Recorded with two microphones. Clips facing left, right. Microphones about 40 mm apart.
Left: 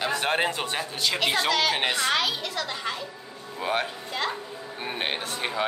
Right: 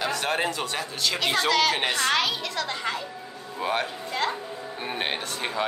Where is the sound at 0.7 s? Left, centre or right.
Centre.